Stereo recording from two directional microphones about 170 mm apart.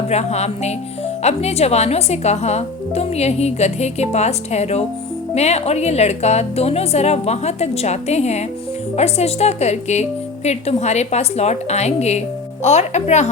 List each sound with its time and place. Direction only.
0.1 s speech: 40° left (ahead or behind)